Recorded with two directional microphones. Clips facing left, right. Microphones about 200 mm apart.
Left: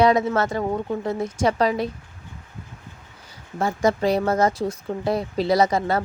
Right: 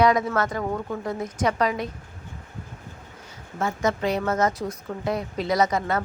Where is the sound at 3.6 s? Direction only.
35° left (ahead or behind).